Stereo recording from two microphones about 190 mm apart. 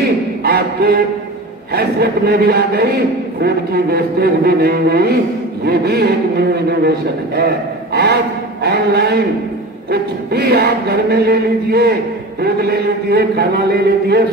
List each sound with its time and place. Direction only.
0.4 s vocal music: 55° right (ahead or behind)
1.7 s chant: 55° right (ahead or behind)
7.3 s speech: 60° right (ahead or behind)
8.6 s chant: 60° right (ahead or behind)